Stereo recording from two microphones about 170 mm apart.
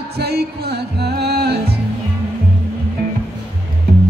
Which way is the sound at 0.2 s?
70° right (ahead or behind).